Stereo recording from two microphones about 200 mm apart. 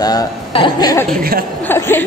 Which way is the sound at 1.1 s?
45° right (ahead or behind).